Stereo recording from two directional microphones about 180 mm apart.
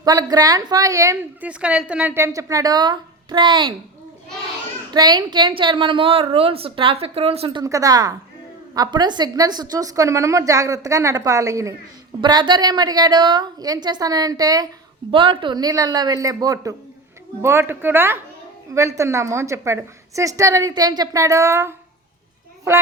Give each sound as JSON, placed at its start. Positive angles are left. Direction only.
{"t": 0.0, "sound": "a woman's voice", "side_deg": -20}
{"t": 4.9, "sound": "a woman's voice", "side_deg": -25}